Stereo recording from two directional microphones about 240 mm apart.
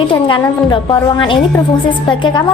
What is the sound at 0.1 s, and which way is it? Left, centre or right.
Speech, centre.